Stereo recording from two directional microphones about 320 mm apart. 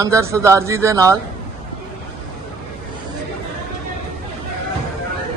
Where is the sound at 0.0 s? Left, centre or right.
Centre.